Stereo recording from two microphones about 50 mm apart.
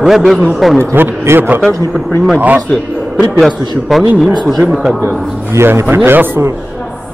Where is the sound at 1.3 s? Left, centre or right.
Right.